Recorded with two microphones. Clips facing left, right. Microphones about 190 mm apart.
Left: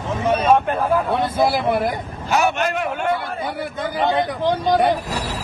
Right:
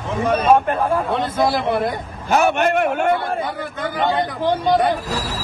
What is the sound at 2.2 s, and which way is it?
Speech, 55° right (ahead or behind).